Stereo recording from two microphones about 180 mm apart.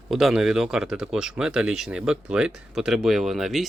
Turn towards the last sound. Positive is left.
turn(degrees=0)  # may be behind; listen again after turning